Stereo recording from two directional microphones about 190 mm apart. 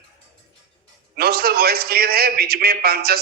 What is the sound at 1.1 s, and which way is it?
A man's voice, 55° right (ahead or behind).